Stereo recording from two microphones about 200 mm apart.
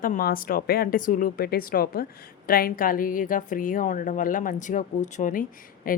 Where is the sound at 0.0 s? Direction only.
45° left (ahead or behind).